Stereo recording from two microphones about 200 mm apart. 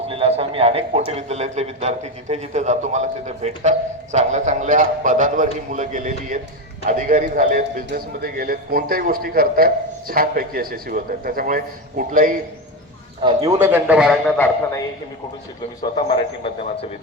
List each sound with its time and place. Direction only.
0.1 s a man's voice: 30° right (ahead or behind)
13.2 s a man's voice: 20° right (ahead or behind)
13.8 s a man's voice: 5° right (ahead or behind)
14.3 s speech: 10° left (ahead or behind)